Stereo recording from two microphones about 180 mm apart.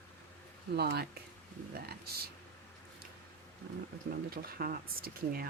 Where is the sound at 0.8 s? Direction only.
65° right (ahead or behind).